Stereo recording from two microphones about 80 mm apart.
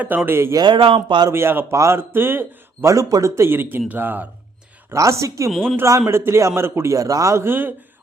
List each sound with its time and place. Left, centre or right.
0.3 s a man's voice: right
0.5 s speech: right
1.3 s a man's voice: right
2.8 s a man's voice: right
4.9 s a man's voice: right
5.5 s speech: centre
5.7 s a man's voice: right
7.4 s a man's voice: right